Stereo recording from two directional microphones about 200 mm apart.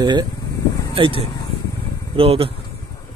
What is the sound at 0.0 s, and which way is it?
Speech, 20° right (ahead or behind).